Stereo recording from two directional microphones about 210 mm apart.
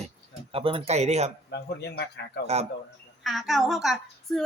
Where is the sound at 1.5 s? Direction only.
50° left (ahead or behind).